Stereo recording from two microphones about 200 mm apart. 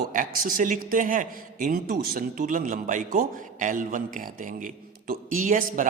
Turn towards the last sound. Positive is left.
turn(degrees=-40)  # may be behind; listen again after turning